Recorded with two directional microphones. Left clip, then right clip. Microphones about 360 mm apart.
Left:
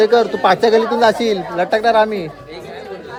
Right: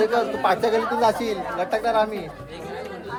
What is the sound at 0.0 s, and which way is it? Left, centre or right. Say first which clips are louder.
Speech: left 8 dB; left.